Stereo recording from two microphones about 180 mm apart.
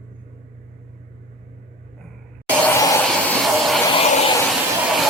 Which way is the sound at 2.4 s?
5° left (ahead or behind).